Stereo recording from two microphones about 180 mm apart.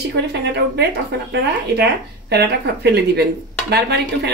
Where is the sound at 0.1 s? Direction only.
70° right (ahead or behind).